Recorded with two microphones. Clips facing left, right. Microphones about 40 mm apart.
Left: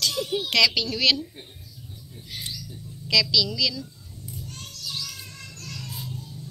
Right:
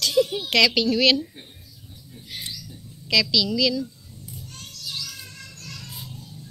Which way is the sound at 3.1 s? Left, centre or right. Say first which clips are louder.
Right 1 dB; right.